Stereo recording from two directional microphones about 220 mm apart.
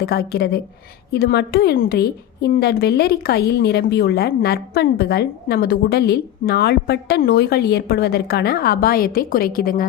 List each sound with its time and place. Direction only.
0.0 s a woman's voice: 45° left (ahead or behind)